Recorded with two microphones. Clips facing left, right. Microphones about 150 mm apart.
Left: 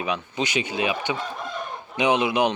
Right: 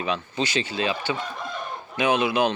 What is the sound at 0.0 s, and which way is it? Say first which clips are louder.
Speech: even; 15° left (ahead or behind).